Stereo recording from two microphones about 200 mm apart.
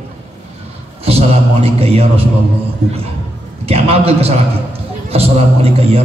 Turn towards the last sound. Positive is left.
turn(degrees=-30)  # may be behind; listen again after turning